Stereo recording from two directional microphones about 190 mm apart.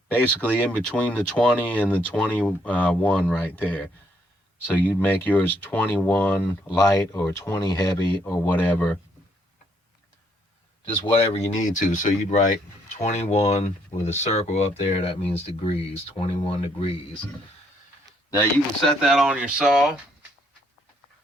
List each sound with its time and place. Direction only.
0.4 s speech: 10° left (ahead or behind)
10.9 s speech: 25° left (ahead or behind)
19.0 s speech: 5° right (ahead or behind)